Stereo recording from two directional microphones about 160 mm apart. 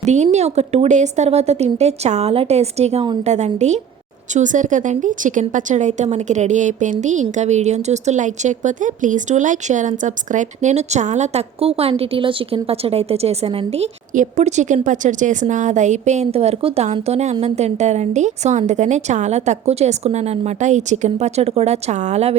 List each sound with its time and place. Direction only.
0.0 s a woman's voice: 45° right (ahead or behind)